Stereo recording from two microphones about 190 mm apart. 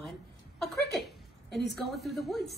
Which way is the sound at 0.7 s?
60° left (ahead or behind).